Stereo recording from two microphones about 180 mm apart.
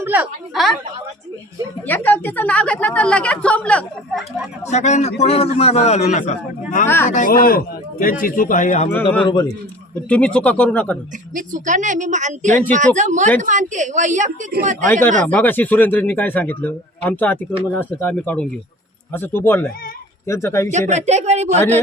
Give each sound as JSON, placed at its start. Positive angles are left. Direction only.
{"t": 0.0, "sound": "a woman's voice", "side_deg": -10}
{"t": 1.9, "sound": "a woman's voice", "side_deg": 10}
{"t": 4.7, "sound": "a man's voice", "side_deg": 40}
{"t": 6.8, "sound": "a woman's voice", "side_deg": 15}
{"t": 7.1, "sound": "speech", "side_deg": 50}
{"t": 9.2, "sound": "a man's voice", "side_deg": 25}
{"t": 10.1, "sound": "a woman's voice", "side_deg": 5}
{"t": 11.3, "sound": "speech", "side_deg": -45}
{"t": 15.3, "sound": "a woman's voice", "side_deg": 10}
{"t": 20.7, "sound": "speech", "side_deg": -40}